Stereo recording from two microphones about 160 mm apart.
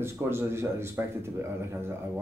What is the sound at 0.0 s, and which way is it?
A man's voice, 15° right (ahead or behind).